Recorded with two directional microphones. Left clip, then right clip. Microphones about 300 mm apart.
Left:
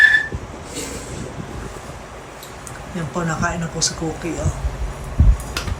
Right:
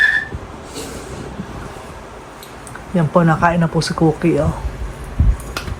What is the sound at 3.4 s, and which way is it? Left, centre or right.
Speech, right.